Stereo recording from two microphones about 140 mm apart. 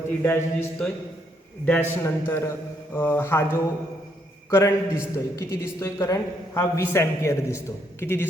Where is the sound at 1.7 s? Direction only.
15° left (ahead or behind).